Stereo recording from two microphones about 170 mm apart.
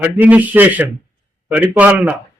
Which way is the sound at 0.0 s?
10° right (ahead or behind).